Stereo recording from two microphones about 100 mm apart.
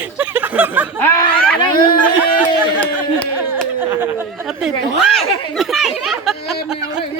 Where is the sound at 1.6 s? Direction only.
50° left (ahead or behind).